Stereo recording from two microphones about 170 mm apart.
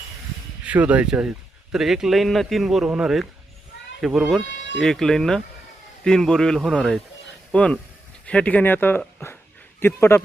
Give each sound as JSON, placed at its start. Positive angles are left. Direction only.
{"t": 0.6, "sound": "a man's voice", "side_deg": -10}